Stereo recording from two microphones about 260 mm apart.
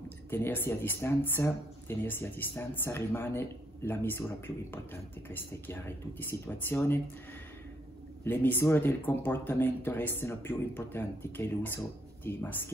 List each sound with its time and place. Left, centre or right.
0.3 s speech: centre
5.3 s speech: centre
8.2 s speech: centre